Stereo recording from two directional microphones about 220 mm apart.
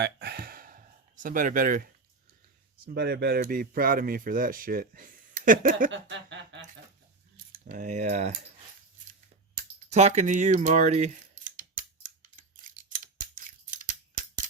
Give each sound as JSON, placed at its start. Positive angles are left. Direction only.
{"t": 0.0, "sound": "a sound", "side_deg": -50}
{"t": 2.8, "sound": "speech", "side_deg": -45}
{"t": 5.9, "sound": "chuckle", "side_deg": -55}
{"t": 7.5, "sound": "speech", "side_deg": -40}
{"t": 9.9, "sound": "speech", "side_deg": -30}
{"t": 12.4, "sound": "scissors", "side_deg": -35}